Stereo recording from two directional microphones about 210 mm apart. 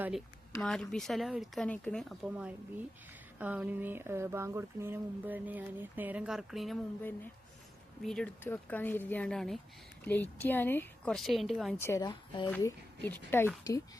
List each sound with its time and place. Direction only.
0.6 s speech: 5° left (ahead or behind)
11.8 s speech: 15° left (ahead or behind)
12.5 s speech: 10° left (ahead or behind)